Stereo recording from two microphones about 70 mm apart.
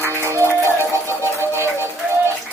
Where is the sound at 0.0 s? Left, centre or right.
Right.